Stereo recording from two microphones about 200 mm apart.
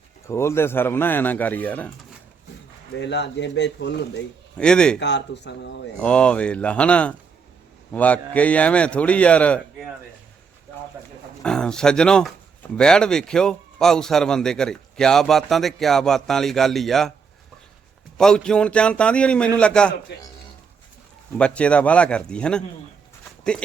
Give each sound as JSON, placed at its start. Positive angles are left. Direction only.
{"t": 0.3, "sound": "speech", "side_deg": 15}
{"t": 3.0, "sound": "a man's voice", "side_deg": 60}
{"t": 4.5, "sound": "a man's voice", "side_deg": 5}
{"t": 4.9, "sound": "a man's voice", "side_deg": 60}
{"t": 6.0, "sound": "a man's voice", "side_deg": 5}
{"t": 11.4, "sound": "a man's voice", "side_deg": 5}
{"t": 18.2, "sound": "a man's voice", "side_deg": 5}
{"t": 20.1, "sound": "a man's voice", "side_deg": 55}
{"t": 21.3, "sound": "a man's voice", "side_deg": 5}